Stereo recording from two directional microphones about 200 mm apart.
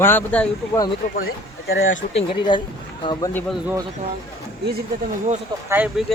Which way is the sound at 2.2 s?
20° left (ahead or behind).